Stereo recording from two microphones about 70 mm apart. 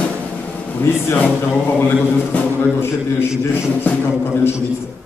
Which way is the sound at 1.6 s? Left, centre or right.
Left.